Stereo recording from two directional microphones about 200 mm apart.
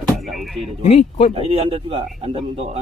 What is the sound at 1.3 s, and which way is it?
Speech, 30° right (ahead or behind).